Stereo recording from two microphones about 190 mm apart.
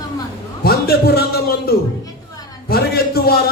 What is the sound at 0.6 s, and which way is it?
A man's voice, 55° left (ahead or behind).